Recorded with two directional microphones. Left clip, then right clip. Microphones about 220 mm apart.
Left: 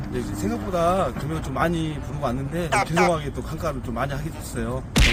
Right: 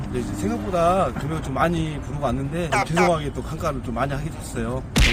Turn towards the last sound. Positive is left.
turn(degrees=0)  # may be behind; listen again after turning